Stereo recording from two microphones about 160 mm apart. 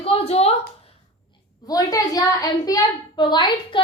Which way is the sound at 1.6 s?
25° left (ahead or behind).